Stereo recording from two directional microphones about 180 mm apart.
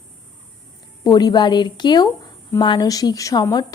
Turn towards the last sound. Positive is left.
turn(degrees=20)  # may be behind; listen again after turning